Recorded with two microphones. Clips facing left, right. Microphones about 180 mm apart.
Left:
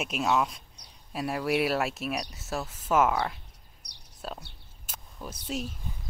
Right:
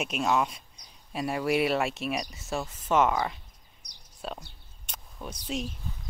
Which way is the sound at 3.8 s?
65° left (ahead or behind).